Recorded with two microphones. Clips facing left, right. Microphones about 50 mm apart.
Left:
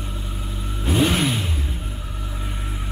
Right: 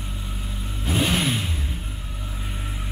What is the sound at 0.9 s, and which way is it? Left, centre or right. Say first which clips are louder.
Vehicle: left 3 dB; centre.